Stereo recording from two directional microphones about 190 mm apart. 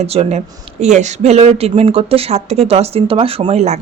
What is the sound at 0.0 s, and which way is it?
Speech, 35° right (ahead or behind).